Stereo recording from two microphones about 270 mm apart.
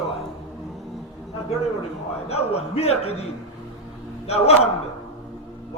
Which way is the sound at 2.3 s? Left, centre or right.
Left.